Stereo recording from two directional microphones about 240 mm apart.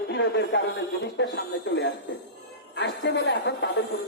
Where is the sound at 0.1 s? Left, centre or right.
Left.